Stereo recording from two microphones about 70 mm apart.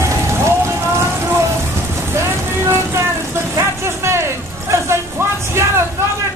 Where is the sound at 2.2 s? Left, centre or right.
Right.